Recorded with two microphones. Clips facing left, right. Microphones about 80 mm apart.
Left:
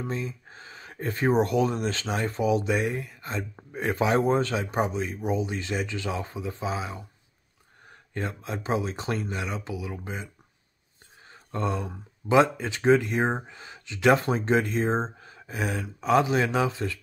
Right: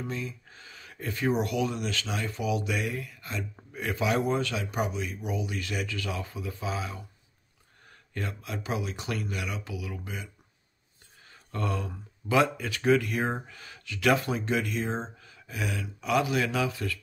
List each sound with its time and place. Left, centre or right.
0.0 s speech: left
7.9 s a sound: left
8.6 s speech: left